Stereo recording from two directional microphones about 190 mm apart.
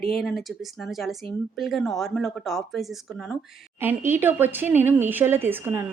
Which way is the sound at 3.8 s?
10° right (ahead or behind).